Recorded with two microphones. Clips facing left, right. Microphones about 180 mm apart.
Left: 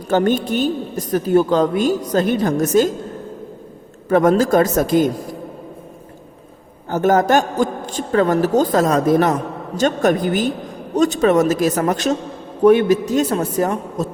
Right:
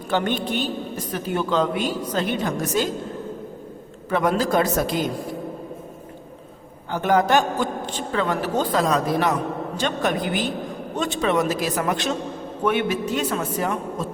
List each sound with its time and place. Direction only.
0.1 s a woman's voice: 45° left (ahead or behind)
4.1 s a woman's voice: 45° left (ahead or behind)
6.9 s a woman's voice: 45° left (ahead or behind)